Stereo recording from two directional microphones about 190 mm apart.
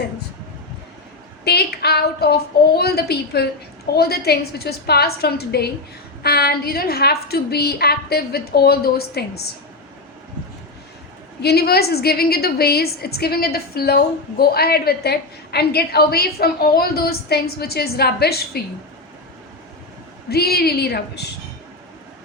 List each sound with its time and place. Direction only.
1.5 s a woman's voice: 60° left (ahead or behind)
11.4 s a woman's voice: 55° left (ahead or behind)
20.3 s a woman's voice: 55° left (ahead or behind)